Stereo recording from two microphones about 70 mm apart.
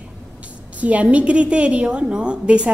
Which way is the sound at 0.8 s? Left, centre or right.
Centre.